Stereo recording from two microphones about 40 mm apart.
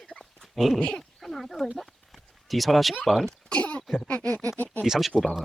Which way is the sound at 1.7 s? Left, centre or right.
Centre.